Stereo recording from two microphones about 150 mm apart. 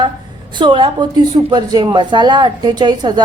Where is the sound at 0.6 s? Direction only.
30° right (ahead or behind).